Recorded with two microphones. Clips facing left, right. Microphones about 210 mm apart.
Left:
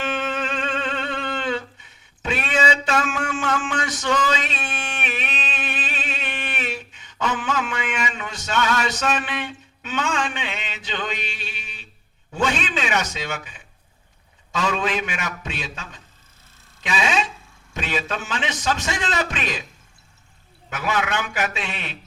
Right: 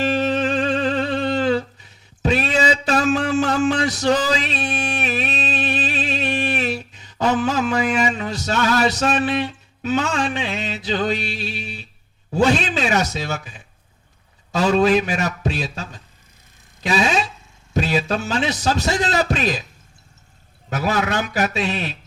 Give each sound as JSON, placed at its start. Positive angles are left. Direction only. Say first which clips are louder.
{"t": 0.0, "sound": "music", "louder": "right 7 dB", "side_deg": -35}
{"t": 12.3, "sound": "a man's voice", "louder": "right 6 dB", "side_deg": -35}
{"t": 20.7, "sound": "a man's voice", "louder": "right 3 dB", "side_deg": -35}